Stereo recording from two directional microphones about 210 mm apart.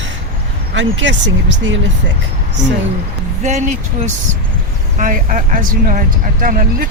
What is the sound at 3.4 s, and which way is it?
Speech, 35° right (ahead or behind).